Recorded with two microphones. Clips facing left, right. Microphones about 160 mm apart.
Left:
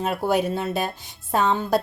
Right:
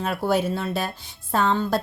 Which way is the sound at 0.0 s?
15° left (ahead or behind).